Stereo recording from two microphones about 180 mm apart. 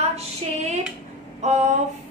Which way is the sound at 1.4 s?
40° right (ahead or behind).